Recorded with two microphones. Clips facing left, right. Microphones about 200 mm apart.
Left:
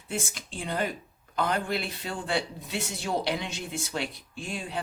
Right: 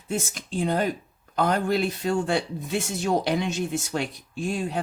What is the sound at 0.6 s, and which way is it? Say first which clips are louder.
Speech: right 6 dB; 45° right (ahead or behind).